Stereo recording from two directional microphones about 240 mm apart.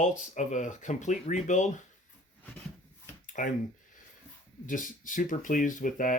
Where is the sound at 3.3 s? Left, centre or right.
Left.